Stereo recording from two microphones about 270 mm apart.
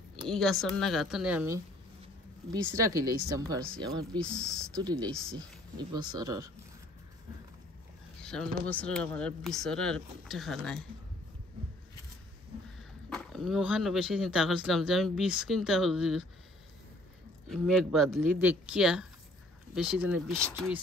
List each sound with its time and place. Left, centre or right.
0.3 s speech: centre
2.7 s speech: centre
4.2 s speech: centre
4.7 s speech: centre
5.1 s speech: centre
5.8 s speech: centre
8.2 s a sound: centre
8.6 s speech: centre
13.1 s speech: centre
17.5 s speech: centre